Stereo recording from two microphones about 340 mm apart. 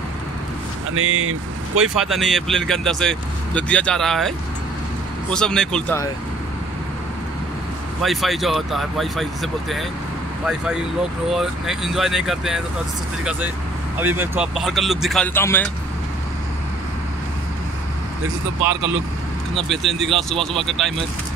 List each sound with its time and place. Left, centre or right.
0.9 s speech: right
2.0 s speech: centre
5.3 s speech: centre
8.0 s speech: centre
14.0 s speech: centre
19.5 s speech: centre